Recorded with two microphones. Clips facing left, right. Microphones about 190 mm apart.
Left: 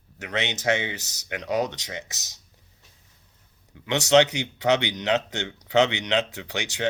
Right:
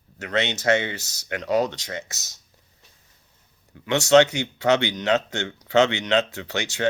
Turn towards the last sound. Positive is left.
turn(degrees=15)  # may be behind; listen again after turning